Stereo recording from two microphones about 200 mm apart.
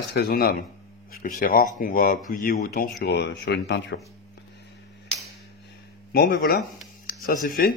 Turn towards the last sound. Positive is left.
turn(degrees=45)  # may be behind; listen again after turning